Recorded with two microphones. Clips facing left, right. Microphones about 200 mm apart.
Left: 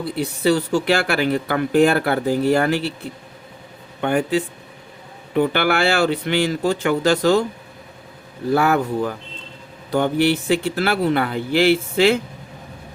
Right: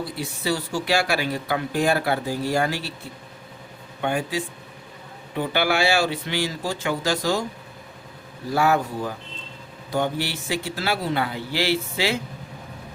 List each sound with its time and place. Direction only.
0.4 s speech: 60° left (ahead or behind)
4.0 s speech: 60° left (ahead or behind)
8.4 s speech: 60° left (ahead or behind)